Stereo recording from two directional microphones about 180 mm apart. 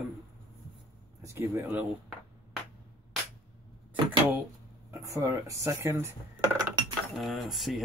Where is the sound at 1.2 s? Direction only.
10° right (ahead or behind).